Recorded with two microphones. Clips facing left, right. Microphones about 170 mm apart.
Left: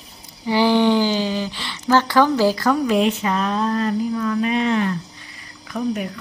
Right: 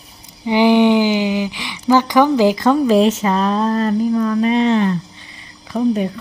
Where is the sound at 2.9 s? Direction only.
35° right (ahead or behind).